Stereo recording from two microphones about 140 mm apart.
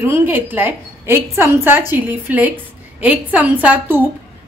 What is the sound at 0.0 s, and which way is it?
A woman's voice, 15° right (ahead or behind).